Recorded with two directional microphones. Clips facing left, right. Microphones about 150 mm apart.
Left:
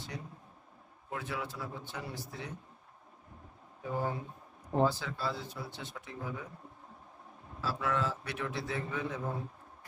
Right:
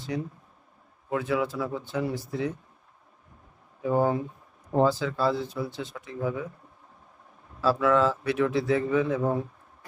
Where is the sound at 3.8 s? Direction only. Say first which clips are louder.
Right 11 dB; 90° right.